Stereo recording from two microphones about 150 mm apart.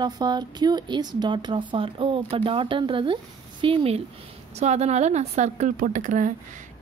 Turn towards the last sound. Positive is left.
turn(degrees=-55)  # may be behind; listen again after turning